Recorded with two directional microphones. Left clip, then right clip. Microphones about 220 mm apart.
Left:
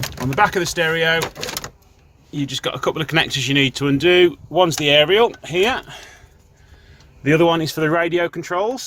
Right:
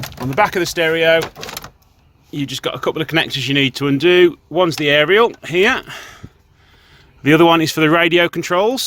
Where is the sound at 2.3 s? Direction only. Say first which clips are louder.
Right 1 dB; 35° right (ahead or behind).